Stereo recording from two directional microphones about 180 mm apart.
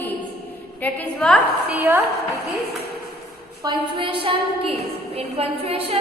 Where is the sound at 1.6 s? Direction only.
10° right (ahead or behind).